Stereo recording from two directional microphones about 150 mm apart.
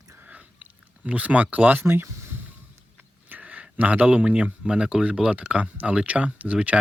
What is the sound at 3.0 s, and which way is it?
Speech, 10° right (ahead or behind).